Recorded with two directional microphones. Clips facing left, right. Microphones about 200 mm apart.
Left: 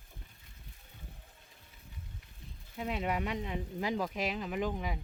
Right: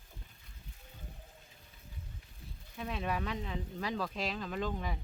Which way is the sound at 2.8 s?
20° left (ahead or behind).